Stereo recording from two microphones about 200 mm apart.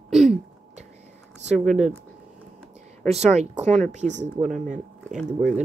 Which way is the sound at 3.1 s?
35° right (ahead or behind).